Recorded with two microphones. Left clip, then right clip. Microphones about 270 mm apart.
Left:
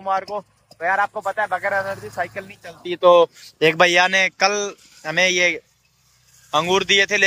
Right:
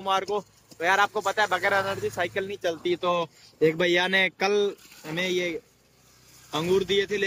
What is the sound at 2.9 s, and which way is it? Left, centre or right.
Speech, centre.